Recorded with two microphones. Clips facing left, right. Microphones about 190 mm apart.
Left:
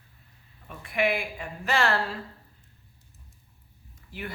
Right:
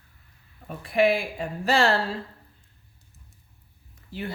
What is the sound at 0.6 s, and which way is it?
A woman's voice, 35° right (ahead or behind).